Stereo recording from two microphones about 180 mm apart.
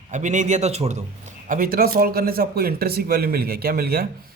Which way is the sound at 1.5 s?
55° right (ahead or behind).